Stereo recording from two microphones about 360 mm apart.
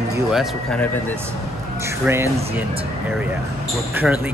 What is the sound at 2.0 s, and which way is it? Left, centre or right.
Speech, centre.